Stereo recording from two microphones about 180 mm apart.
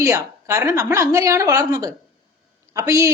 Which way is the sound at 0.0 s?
15° right (ahead or behind).